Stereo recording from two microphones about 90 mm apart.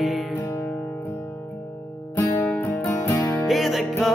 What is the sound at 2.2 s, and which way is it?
Music, 25° left (ahead or behind).